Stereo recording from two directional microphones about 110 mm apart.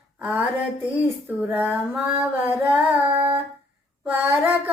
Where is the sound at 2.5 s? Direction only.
15° right (ahead or behind).